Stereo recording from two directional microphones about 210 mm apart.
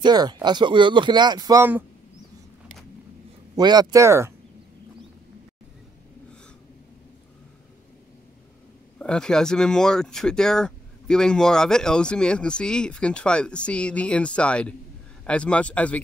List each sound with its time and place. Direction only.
0.0 s speech: 20° right (ahead or behind)
3.5 s speech: 20° right (ahead or behind)
8.9 s speech: 5° left (ahead or behind)